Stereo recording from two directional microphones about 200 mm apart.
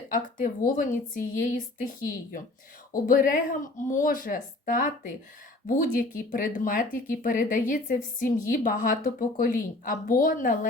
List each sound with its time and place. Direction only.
0.1 s a woman's voice: 40° left (ahead or behind)